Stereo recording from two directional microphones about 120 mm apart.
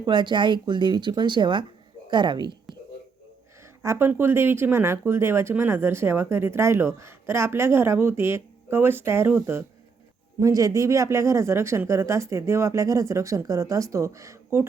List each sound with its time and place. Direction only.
0.0 s speech: 40° right (ahead or behind)
3.8 s speech: 15° right (ahead or behind)
10.4 s speech: 30° right (ahead or behind)